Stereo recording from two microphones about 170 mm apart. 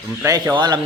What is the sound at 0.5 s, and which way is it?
Speech, 25° right (ahead or behind).